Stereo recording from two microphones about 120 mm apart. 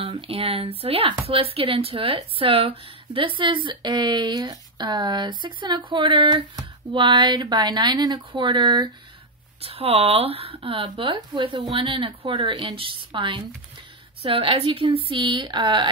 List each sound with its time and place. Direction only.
0.0 s speech: 50° right (ahead or behind)
9.6 s speech: 55° right (ahead or behind)